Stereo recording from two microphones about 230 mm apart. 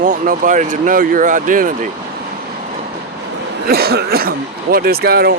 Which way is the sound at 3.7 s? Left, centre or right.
Right.